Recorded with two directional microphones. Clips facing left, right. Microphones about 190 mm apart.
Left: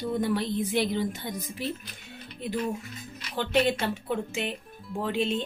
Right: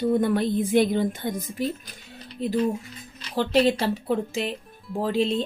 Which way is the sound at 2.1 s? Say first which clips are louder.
Right 7 dB; 35° right (ahead or behind).